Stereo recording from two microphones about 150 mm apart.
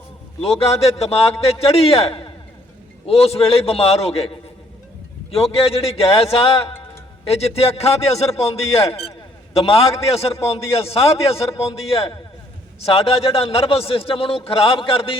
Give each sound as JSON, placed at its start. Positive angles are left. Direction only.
{"t": 0.4, "sound": "a man's voice", "side_deg": 40}